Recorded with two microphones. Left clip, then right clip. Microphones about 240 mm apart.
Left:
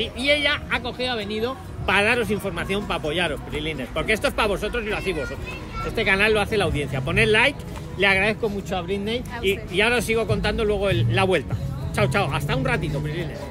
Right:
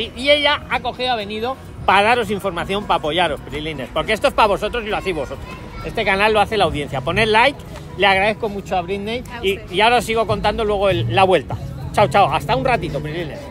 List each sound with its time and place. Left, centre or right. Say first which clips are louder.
0.0 s speech: right 5 dB; right